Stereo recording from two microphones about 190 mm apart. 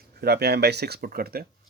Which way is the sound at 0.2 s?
60° right (ahead or behind).